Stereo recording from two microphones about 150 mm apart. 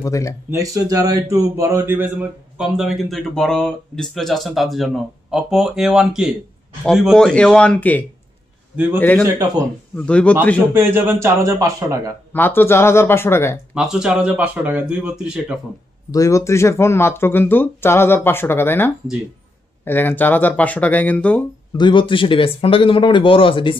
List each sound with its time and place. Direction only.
0.0 s speech: 20° left (ahead or behind)
0.5 s speech: 20° right (ahead or behind)
2.5 s speech: 5° right (ahead or behind)
9.2 s speech: 25° right (ahead or behind)
9.9 s speech: 5° left (ahead or behind)
10.7 s speech: 15° right (ahead or behind)
12.3 s speech: 15° left (ahead or behind)
13.7 s speech: 5° right (ahead or behind)
16.1 s speech: 20° left (ahead or behind)
21.7 s speech: 30° left (ahead or behind)